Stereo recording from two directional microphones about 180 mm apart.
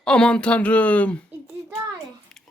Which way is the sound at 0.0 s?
5° left (ahead or behind).